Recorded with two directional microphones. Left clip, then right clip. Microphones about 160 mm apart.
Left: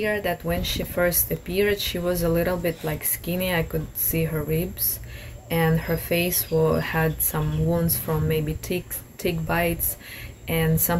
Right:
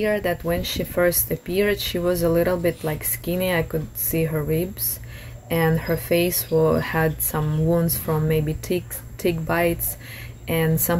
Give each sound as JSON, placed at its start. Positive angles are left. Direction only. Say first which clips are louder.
{"t": 0.0, "sound": "speech", "louder": "right 3 dB", "side_deg": -30}